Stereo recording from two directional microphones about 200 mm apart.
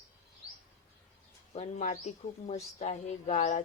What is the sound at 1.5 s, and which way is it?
Speech, 35° left (ahead or behind).